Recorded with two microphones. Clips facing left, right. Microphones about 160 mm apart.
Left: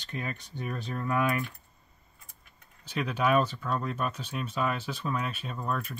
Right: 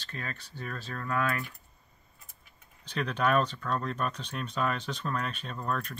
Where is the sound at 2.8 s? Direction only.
5° left (ahead or behind).